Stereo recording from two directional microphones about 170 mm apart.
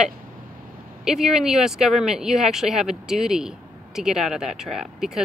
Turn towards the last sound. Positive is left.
turn(degrees=0)  # may be behind; listen again after turning